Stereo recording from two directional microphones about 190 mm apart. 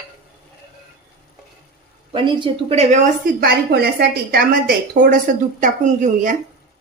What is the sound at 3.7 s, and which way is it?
A woman's voice, 55° right (ahead or behind).